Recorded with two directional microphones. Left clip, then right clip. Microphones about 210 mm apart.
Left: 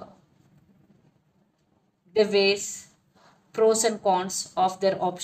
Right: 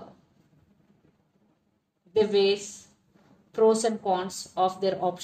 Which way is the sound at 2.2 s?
30° left (ahead or behind).